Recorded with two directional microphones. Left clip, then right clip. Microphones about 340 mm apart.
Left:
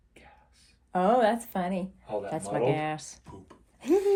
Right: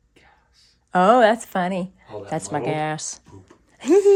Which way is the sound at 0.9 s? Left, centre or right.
Right.